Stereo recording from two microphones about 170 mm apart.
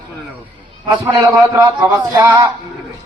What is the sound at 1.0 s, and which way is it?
A man's voice, 20° right (ahead or behind).